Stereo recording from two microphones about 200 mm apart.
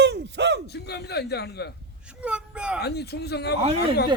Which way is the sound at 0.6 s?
55° left (ahead or behind).